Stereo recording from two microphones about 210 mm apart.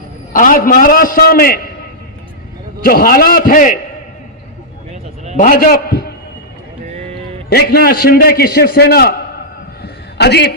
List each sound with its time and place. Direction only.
0.3 s a man's voice: 40° left (ahead or behind)
2.8 s a man's voice: 45° left (ahead or behind)
4.9 s vehicle: 30° right (ahead or behind)
5.4 s a man's voice: 40° left (ahead or behind)
7.5 s a man's voice: 50° left (ahead or behind)
9.8 s a sound: 50° left (ahead or behind)